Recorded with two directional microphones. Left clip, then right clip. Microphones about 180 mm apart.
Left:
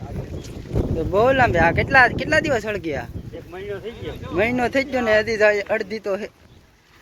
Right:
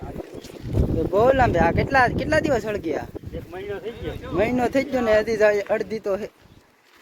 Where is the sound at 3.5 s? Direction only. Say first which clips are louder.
Left 1 dB; 50° left (ahead or behind).